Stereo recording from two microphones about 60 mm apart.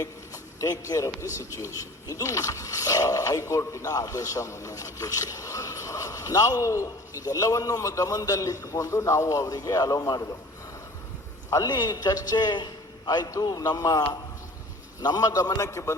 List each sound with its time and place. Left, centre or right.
0.6 s speech: left
11.5 s a man's voice: left